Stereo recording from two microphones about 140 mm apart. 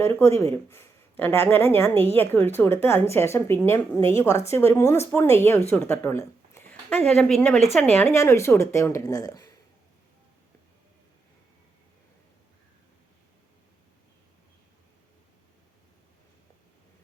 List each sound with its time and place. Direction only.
0.0 s a woman's voice: 20° left (ahead or behind); by 7.6 s 5° left (ahead or behind)
7.9 s a woman's voice: 15° left (ahead or behind)